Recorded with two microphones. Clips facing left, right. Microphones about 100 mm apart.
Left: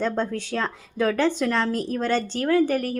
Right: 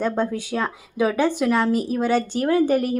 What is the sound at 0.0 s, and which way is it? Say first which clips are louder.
Speech: right 2 dB; 10° right (ahead or behind).